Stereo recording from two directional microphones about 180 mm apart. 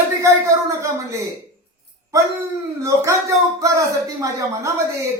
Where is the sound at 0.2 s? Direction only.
15° right (ahead or behind).